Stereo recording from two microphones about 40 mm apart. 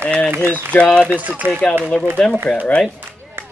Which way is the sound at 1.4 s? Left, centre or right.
Right.